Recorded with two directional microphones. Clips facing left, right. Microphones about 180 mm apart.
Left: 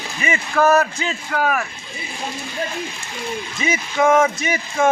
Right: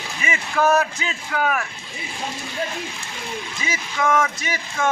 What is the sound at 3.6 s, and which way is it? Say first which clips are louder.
Speech: left 6 dB; 20° left (ahead or behind).